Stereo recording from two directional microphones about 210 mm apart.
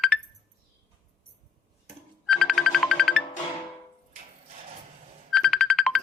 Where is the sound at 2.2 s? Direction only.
Centre (ahead or behind).